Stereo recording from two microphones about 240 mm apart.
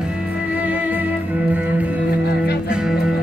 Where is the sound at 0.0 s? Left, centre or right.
Centre.